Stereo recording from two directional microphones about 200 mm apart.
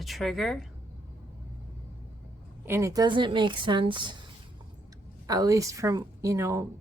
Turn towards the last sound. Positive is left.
turn(degrees=-15)  # may be behind; listen again after turning